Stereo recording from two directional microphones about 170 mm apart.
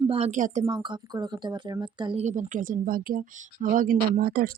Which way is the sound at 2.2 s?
45° right (ahead or behind).